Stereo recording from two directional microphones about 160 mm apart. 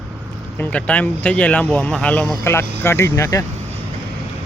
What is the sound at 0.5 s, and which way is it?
Speech, 10° left (ahead or behind).